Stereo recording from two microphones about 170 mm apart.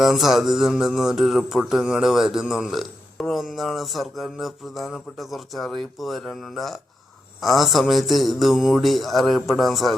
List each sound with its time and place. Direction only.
0.0 s mantra: centre (ahead or behind)